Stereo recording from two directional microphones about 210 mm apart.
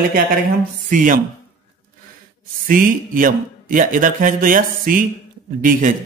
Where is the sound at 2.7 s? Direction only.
40° right (ahead or behind).